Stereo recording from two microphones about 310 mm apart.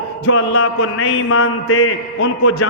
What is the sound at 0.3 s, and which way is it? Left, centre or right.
A man's voice, left.